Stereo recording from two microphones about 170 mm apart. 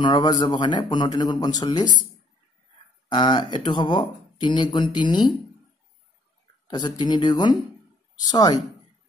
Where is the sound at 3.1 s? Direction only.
25° left (ahead or behind).